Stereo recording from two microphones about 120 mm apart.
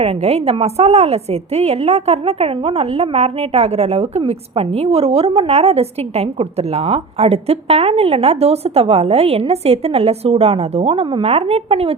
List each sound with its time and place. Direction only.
0.0 s a woman's voice: 60° right (ahead or behind)